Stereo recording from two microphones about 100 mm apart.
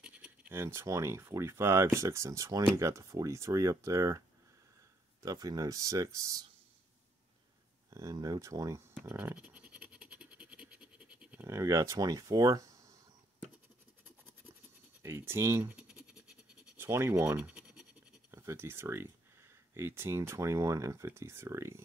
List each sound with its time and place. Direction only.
0.5 s speech: 25° right (ahead or behind)
5.2 s speech: 40° right (ahead or behind)
7.9 s speech: 35° right (ahead or behind)
8.9 s scratch: 20° right (ahead or behind)
11.4 s speech: 30° right (ahead or behind)
15.0 s speech: 25° right (ahead or behind)
15.7 s scratch: 10° right (ahead or behind)
16.7 s speech: 25° right (ahead or behind)
18.3 s speech: 30° right (ahead or behind)